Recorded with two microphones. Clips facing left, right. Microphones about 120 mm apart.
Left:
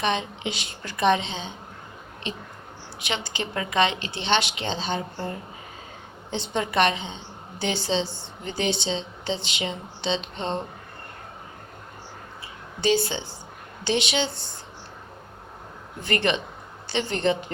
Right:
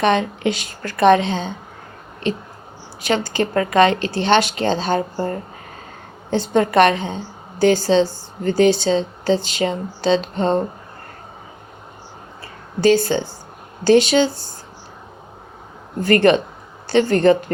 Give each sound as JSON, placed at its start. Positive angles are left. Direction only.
{"t": 0.0, "sound": "speech", "side_deg": -50}
{"t": 3.1, "sound": "speech", "side_deg": -45}
{"t": 12.8, "sound": "speech", "side_deg": -50}
{"t": 16.0, "sound": "speech", "side_deg": -45}